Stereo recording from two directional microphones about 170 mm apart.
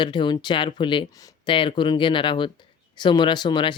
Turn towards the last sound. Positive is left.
turn(degrees=25)  # may be behind; listen again after turning